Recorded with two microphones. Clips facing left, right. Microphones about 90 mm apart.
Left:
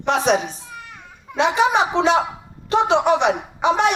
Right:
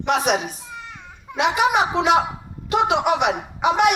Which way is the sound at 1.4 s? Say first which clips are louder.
Left 1 dB; 30° left (ahead or behind).